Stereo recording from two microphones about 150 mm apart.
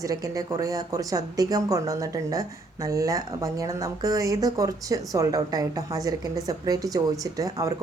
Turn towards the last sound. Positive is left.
turn(degrees=-25)  # may be behind; listen again after turning